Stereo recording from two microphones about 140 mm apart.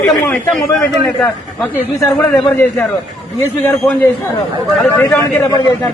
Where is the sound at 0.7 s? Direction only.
5° left (ahead or behind).